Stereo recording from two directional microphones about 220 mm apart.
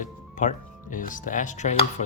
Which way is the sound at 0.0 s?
35° left (ahead or behind).